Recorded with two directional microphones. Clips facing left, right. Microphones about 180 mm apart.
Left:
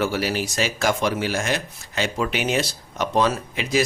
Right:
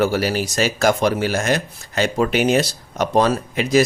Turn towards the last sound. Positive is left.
turn(degrees=-45)  # may be behind; listen again after turning